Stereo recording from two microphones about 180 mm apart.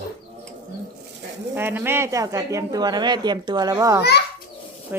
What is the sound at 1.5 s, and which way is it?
Speech, 10° right (ahead or behind).